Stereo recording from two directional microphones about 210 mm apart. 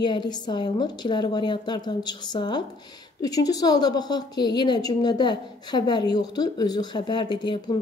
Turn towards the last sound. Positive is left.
turn(degrees=20)  # may be behind; listen again after turning